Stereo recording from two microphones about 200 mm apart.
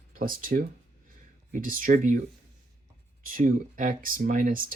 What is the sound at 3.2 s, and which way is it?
Speech, 45° right (ahead or behind).